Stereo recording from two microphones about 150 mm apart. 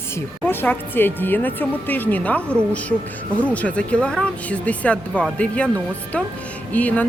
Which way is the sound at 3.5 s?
10° left (ahead or behind).